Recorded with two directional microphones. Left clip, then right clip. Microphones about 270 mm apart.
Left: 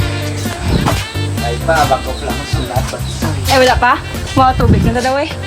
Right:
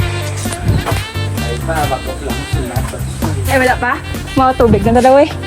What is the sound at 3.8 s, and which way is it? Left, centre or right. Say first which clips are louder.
Speech: left 5 dB; centre.